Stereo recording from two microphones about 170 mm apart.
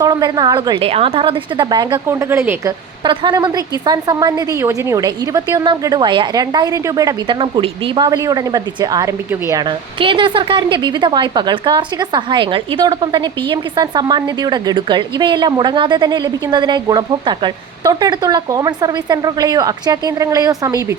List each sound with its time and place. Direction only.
0.0 s a woman's voice: 20° right (ahead or behind)
3.0 s a woman's voice: 25° right (ahead or behind)